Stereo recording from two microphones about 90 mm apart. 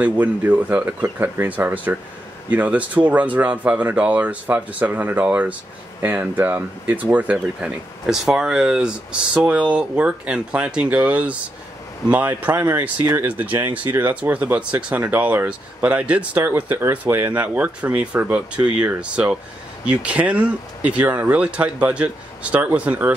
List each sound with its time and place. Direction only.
0.0 s speech: 20° right (ahead or behind)
8.1 s speech: 5° right (ahead or behind)